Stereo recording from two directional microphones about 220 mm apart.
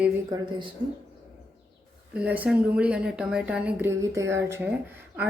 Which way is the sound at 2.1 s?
5° right (ahead or behind).